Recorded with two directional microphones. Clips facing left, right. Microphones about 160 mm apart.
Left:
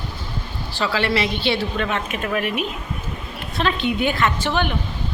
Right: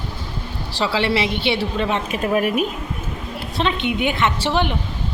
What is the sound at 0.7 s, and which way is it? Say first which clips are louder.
Speech: right 1 dB; 25° right (ahead or behind).